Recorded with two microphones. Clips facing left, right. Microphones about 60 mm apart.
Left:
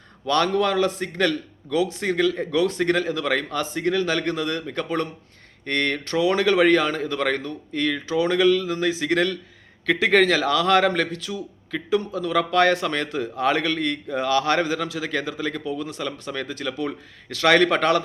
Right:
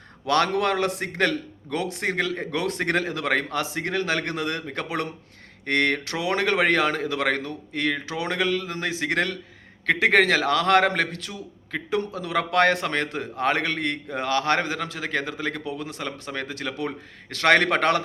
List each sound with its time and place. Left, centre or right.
0.3 s a man's voice: right